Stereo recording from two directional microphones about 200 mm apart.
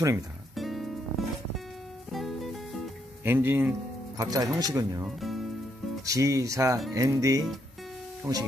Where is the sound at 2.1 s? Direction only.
Centre (ahead or behind).